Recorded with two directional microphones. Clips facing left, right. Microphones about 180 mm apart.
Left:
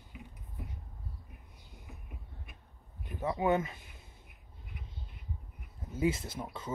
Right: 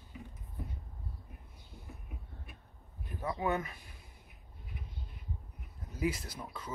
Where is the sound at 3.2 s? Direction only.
20° left (ahead or behind).